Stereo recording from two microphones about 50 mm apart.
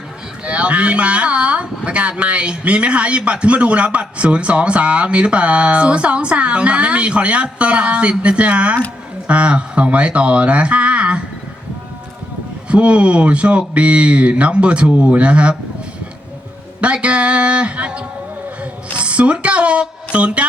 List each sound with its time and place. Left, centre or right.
0.4 s speech: right
12.6 s speech: right
16.8 s speech: right